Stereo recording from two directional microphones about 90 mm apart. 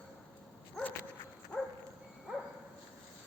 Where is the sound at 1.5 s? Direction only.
10° left (ahead or behind).